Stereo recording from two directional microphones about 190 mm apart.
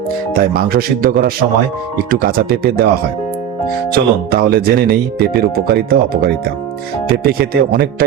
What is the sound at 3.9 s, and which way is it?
Speech, 50° right (ahead or behind).